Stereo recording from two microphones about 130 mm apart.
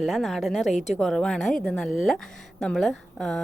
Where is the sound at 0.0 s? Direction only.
Centre (ahead or behind).